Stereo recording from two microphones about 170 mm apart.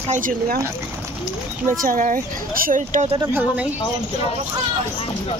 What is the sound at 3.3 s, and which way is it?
Speech, 10° right (ahead or behind).